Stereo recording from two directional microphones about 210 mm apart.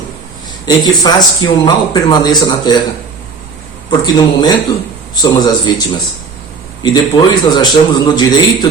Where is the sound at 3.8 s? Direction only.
20° left (ahead or behind).